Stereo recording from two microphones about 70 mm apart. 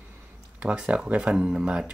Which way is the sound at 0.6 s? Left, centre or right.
Centre.